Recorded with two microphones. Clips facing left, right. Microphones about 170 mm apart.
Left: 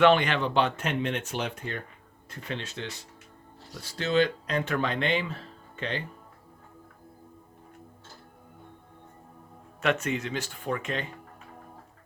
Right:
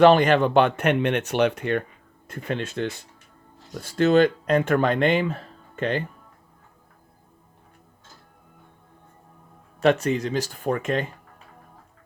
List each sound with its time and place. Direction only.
0.0 s speech: 40° right (ahead or behind); by 1.8 s 70° right (ahead or behind)
2.3 s speech: 50° right (ahead or behind)
9.8 s speech: 35° right (ahead or behind)